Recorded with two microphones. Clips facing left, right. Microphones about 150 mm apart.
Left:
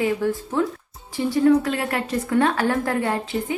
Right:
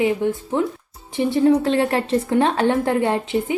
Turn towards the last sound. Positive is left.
turn(degrees=-25)  # may be behind; listen again after turning